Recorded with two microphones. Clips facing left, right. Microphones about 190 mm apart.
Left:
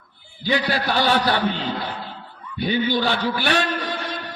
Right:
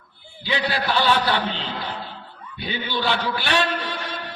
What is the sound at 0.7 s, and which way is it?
Speech, 45° left (ahead or behind).